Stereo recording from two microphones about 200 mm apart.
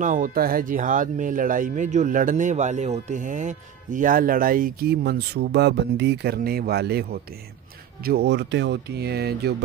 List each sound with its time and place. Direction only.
0.0 s speech: 40° right (ahead or behind)